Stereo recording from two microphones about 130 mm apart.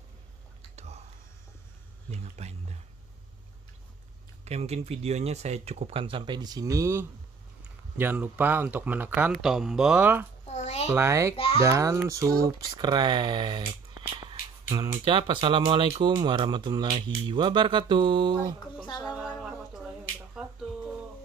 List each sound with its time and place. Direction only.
0.7 s whispering: 55° right (ahead or behind)
2.0 s speech: 55° right (ahead or behind)
4.5 s speech: 55° right (ahead or behind)
6.0 s speech: 40° right (ahead or behind); by 9.3 s 15° right (ahead or behind)
9.3 s speech: centre (ahead or behind)
10.4 s a sound: 60° left (ahead or behind)
10.9 s speech: 20° right (ahead or behind)
11.3 s a child's voice: 45° left (ahead or behind)
11.6 s speech: 20° right (ahead or behind); by 18.6 s 35° right (ahead or behind)
18.9 s a sound: 35° left (ahead or behind)
19.1 s a sound: 5° right (ahead or behind)